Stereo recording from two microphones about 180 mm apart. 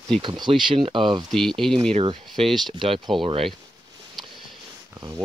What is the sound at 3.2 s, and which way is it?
Speech, 30° right (ahead or behind).